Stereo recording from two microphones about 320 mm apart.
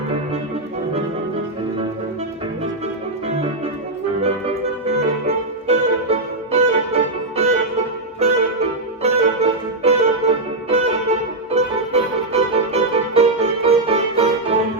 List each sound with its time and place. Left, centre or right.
4.2 s music: centre
9.0 s music: centre